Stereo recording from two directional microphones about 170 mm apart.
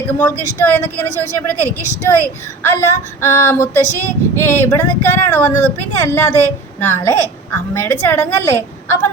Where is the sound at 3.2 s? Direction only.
10° left (ahead or behind).